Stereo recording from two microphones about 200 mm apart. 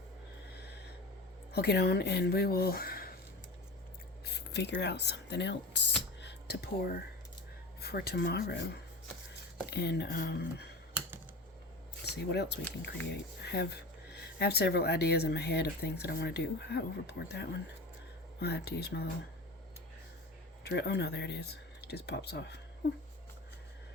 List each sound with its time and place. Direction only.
1.5 s speech: 55° left (ahead or behind)
4.3 s speech: 55° left (ahead or behind)
6.2 s a sound: 50° left (ahead or behind)
7.8 s speech: 50° left (ahead or behind)
12.0 s speech: 55° left (ahead or behind)
20.7 s speech: 55° left (ahead or behind)